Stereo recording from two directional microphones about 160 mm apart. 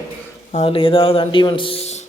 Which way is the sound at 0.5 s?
35° left (ahead or behind).